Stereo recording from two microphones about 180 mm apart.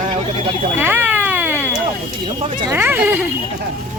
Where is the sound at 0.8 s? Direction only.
10° right (ahead or behind).